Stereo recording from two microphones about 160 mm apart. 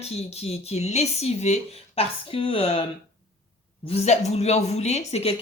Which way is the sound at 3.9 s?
40° left (ahead or behind).